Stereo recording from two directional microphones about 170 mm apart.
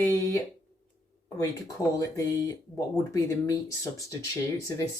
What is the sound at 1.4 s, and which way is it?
Speech, 20° left (ahead or behind).